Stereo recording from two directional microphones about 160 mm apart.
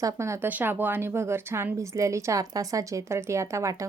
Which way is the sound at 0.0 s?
20° right (ahead or behind).